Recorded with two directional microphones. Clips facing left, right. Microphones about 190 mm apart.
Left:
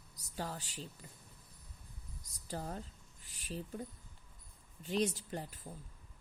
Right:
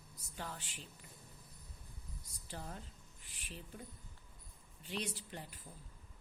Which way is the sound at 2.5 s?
40° left (ahead or behind).